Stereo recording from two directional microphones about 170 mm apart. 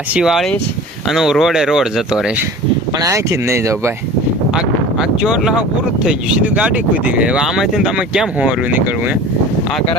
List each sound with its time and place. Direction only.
0.1 s speech: 5° right (ahead or behind)
3.0 s speech: 15° right (ahead or behind)
4.5 s speech: 5° right (ahead or behind)